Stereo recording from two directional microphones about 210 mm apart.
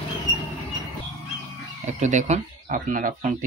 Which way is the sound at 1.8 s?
35° right (ahead or behind).